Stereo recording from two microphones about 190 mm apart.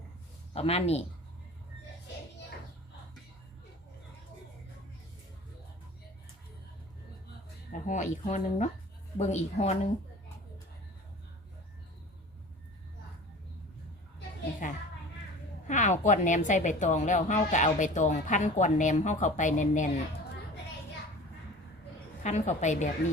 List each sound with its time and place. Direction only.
0.5 s a woman's voice: 30° left (ahead or behind)
7.7 s a woman's voice: 40° left (ahead or behind)
15.6 s a woman's voice: 40° left (ahead or behind)
22.2 s a woman's voice: 40° left (ahead or behind)